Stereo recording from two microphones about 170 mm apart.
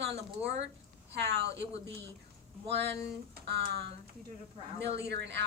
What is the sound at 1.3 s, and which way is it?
Speech, 80° right.